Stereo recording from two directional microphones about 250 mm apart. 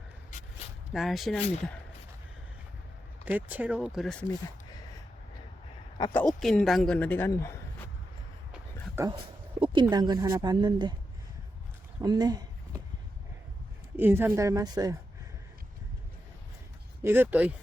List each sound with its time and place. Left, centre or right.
0.9 s a man's voice: centre
1.4 s speech: left
3.2 s a man's voice: centre
6.0 s a man's voice: centre
8.5 s dog: centre
9.6 s speech: centre
11.9 s speech: centre
13.9 s speech: centre
17.0 s speech: centre